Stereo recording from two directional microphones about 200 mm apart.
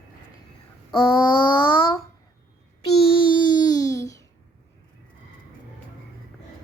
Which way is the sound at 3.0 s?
25° left (ahead or behind).